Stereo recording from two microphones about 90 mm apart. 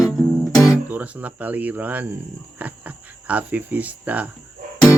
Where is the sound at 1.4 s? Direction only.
20° right (ahead or behind).